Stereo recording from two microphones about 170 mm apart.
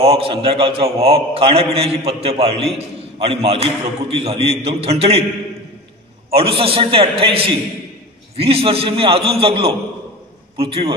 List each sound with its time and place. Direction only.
0.0 s a man's voice: 35° right (ahead or behind)
6.3 s a man's voice: 35° right (ahead or behind)